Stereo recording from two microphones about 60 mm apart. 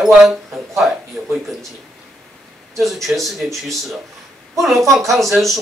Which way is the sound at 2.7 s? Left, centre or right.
Centre.